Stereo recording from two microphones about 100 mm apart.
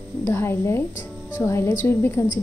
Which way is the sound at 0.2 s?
25° left (ahead or behind).